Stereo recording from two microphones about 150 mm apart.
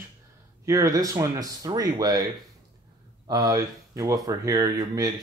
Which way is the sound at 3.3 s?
25° right (ahead or behind).